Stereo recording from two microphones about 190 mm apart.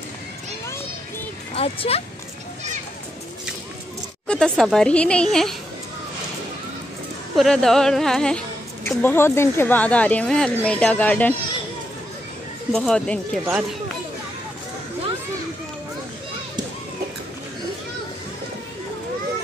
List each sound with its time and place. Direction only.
1.5 s speech: 30° left (ahead or behind)
4.3 s speech: 5° left (ahead or behind)
7.3 s a woman's voice: centre (ahead or behind)
12.7 s speech: 5° left (ahead or behind)
13.5 s speech: 5° right (ahead or behind)